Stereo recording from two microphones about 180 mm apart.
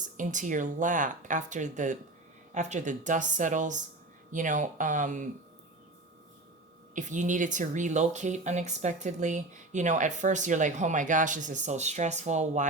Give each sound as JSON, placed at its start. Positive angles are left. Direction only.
{"t": 0.0, "sound": "speech", "side_deg": -45}
{"t": 6.9, "sound": "speech", "side_deg": -45}